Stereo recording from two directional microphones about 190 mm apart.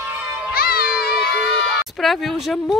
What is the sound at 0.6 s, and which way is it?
Music, 50° left (ahead or behind).